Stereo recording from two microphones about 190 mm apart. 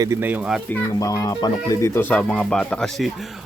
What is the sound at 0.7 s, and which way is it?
Speech, 15° left (ahead or behind).